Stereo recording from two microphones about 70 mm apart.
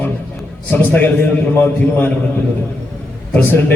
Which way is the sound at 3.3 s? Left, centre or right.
Left.